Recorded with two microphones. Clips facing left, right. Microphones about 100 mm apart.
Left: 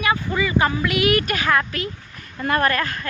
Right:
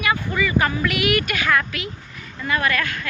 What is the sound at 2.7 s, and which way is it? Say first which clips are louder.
Speech: left 1 dB; 35° left (ahead or behind).